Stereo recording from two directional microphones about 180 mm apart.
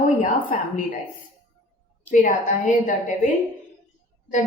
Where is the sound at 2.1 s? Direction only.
45° left (ahead or behind).